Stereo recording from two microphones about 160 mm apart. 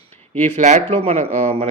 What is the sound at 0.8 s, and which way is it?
Speech, 35° right (ahead or behind).